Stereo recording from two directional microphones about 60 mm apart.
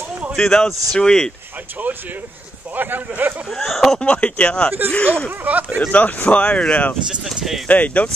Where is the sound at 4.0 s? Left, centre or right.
Left.